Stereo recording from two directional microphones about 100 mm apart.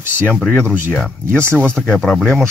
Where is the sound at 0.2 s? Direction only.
15° left (ahead or behind).